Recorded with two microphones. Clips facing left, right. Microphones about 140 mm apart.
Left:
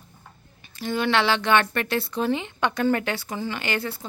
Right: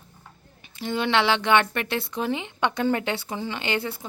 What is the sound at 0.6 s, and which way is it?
A woman's voice, 20° right (ahead or behind).